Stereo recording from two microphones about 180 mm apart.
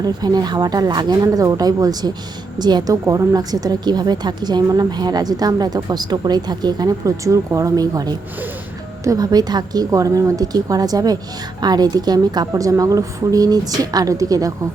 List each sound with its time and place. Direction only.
0.0 s a woman's voice: 20° right (ahead or behind)